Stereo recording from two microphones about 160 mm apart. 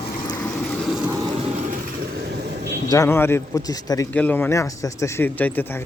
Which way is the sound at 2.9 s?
15° left (ahead or behind).